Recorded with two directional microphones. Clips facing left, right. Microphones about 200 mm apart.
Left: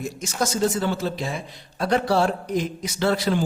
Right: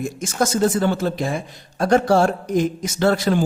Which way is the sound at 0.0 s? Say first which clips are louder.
Right 4 dB; 50° right (ahead or behind).